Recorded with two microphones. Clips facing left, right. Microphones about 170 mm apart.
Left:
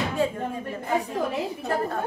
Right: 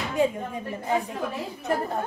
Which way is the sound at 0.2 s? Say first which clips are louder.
Right 3 dB; 15° right (ahead or behind).